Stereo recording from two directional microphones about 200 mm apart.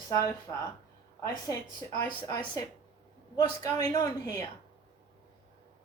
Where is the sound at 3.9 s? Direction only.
20° left (ahead or behind).